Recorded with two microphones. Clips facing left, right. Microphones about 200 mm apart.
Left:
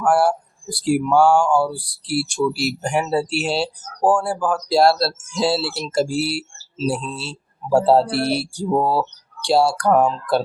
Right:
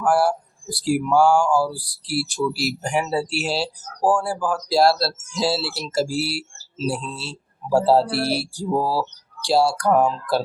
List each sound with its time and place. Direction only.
0.0 s speech: centre (ahead or behind)
8.7 s speech: 25° left (ahead or behind)
9.4 s speech: centre (ahead or behind)